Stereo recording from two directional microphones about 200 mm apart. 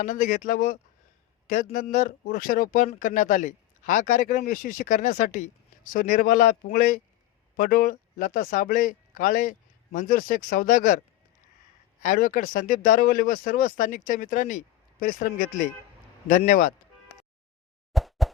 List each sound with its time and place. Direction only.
0.0 s speech: 40° left (ahead or behind)
12.0 s speech: 40° left (ahead or behind)
17.9 s plop: centre (ahead or behind)